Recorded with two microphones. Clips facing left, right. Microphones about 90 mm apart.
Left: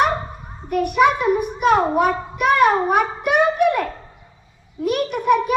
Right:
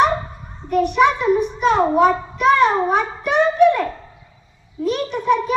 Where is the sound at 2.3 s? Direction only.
55° left (ahead or behind).